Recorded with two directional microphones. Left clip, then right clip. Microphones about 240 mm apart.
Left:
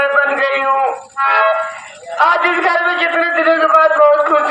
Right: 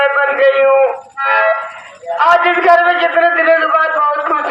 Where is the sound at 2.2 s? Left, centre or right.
Centre.